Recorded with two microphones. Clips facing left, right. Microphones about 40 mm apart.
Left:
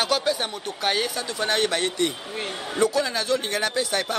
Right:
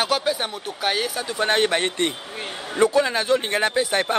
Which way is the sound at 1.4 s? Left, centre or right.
Right.